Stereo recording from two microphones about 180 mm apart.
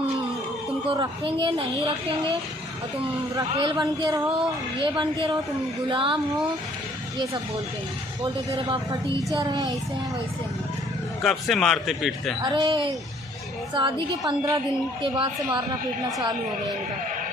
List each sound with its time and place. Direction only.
0.9 s a woman's voice: 30° right (ahead or behind)
3.3 s a woman's voice: 25° right (ahead or behind)
8.2 s a woman's voice: 20° right (ahead or behind)
11.2 s speech: centre (ahead or behind)
12.4 s a woman's voice: 25° right (ahead or behind)